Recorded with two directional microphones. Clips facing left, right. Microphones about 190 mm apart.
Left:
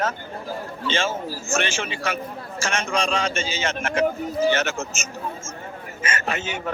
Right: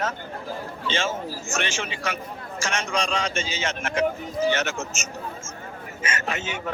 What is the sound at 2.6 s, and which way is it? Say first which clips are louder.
Speech: left 2 dB; 50° left (ahead or behind).